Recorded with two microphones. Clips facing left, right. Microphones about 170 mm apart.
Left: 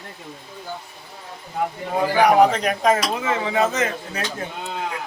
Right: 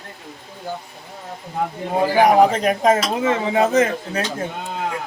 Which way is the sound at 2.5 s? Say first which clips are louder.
Right 3 dB; 25° right (ahead or behind).